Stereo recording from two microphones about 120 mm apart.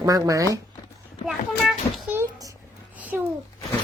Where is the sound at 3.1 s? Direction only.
15° right (ahead or behind).